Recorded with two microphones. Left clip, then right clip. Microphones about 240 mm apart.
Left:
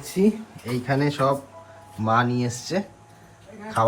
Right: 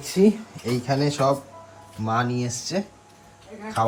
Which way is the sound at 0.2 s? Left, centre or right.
Right.